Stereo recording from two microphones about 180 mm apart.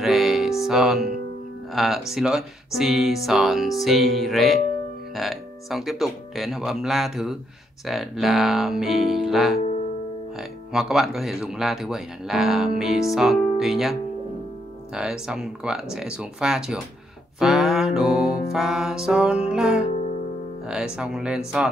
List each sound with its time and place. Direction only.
0.0 s music: centre (ahead or behind)
1.7 s speech: centre (ahead or behind)
15.0 s speech: 5° right (ahead or behind)
17.4 s mantra: centre (ahead or behind)
18.5 s speech: centre (ahead or behind)